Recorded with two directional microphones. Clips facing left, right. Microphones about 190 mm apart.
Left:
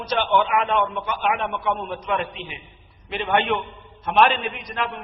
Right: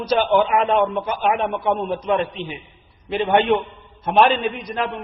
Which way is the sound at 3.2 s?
30° right (ahead or behind).